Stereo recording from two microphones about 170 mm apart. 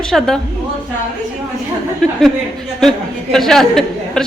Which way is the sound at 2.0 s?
5° left (ahead or behind).